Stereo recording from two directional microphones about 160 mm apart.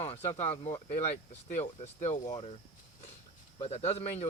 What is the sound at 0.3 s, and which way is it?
Speech, 45° left (ahead or behind).